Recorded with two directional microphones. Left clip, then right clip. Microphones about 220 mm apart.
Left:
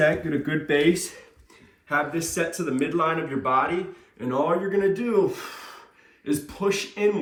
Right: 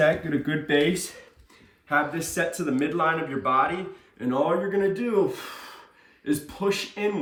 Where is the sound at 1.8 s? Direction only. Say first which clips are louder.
Even; 5° right (ahead or behind).